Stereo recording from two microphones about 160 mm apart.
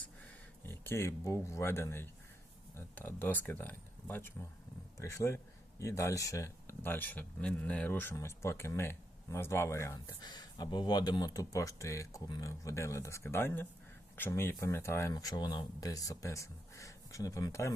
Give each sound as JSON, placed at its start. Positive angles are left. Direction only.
{"t": 0.6, "sound": "speech", "side_deg": 15}